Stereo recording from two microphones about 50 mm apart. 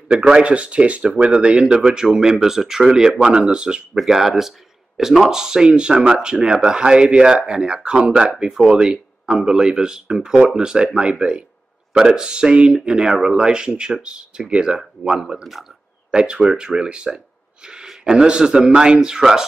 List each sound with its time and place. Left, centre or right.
0.3 s speech: right
8.4 s speech: centre